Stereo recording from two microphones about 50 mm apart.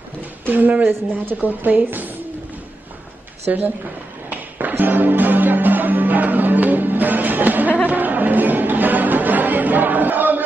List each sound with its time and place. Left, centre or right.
0.5 s speech: right
3.5 s a woman's voice: right
4.3 s music: right